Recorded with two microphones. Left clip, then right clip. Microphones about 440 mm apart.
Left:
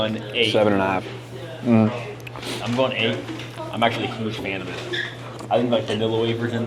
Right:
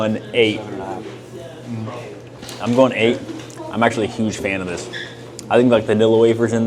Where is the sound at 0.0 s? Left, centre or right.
Right.